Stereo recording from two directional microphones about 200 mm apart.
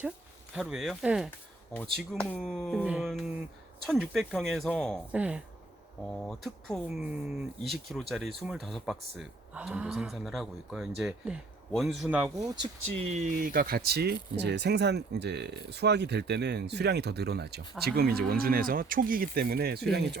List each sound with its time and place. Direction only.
0.5 s speech: centre (ahead or behind)
5.1 s speech: 5° right (ahead or behind)
6.1 s speech: 5° left (ahead or behind); by 12.5 s 10° right (ahead or behind)
13.0 s speech: 35° right (ahead or behind); by 20.1 s 55° right (ahead or behind)